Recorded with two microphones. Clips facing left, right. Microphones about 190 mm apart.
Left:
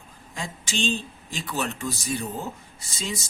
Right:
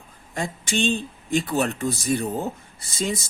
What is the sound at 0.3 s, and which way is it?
Speech, 55° right (ahead or behind).